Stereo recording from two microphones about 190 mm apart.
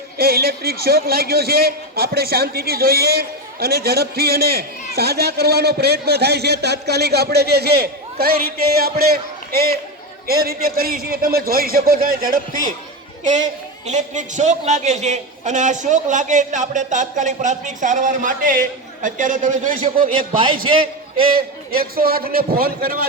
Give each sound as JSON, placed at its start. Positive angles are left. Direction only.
{"t": 0.2, "sound": "a man's voice", "side_deg": -55}
{"t": 13.8, "sound": "a man's voice", "side_deg": -40}
{"t": 20.7, "sound": "a man's voice", "side_deg": -30}
{"t": 21.7, "sound": "a man's voice", "side_deg": -50}